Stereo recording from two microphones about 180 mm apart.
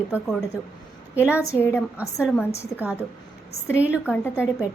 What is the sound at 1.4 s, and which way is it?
Speech, 15° left (ahead or behind).